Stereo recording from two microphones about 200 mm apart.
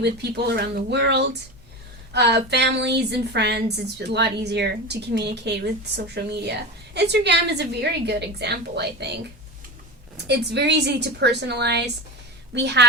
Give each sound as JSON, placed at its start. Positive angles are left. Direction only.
{"t": 0.0, "sound": "a woman's voice", "side_deg": -55}
{"t": 10.2, "sound": "a woman's voice", "side_deg": -55}